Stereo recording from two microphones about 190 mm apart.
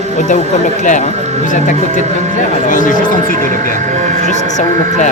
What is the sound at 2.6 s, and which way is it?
Speech, 45° left (ahead or behind).